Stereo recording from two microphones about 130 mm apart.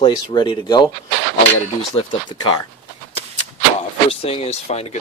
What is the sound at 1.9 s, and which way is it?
Speech, 35° left (ahead or behind).